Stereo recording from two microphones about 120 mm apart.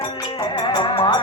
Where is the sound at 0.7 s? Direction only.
50° left (ahead or behind).